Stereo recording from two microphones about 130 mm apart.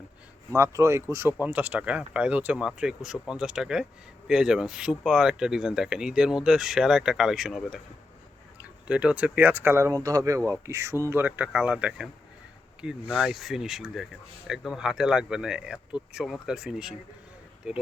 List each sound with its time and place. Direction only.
0.5 s speech: 20° right (ahead or behind); by 7.8 s centre (ahead or behind)
8.9 s speech: 10° right (ahead or behind)